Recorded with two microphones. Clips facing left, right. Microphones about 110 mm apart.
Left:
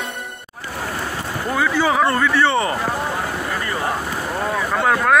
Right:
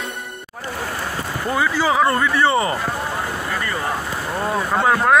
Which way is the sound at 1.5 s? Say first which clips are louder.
Left 1 dB; 5° right (ahead or behind).